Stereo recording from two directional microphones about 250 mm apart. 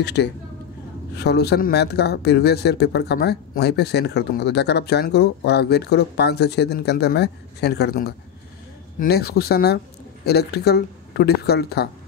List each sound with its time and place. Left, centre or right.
0.0 s a woman's voice: left
9.1 s speech: left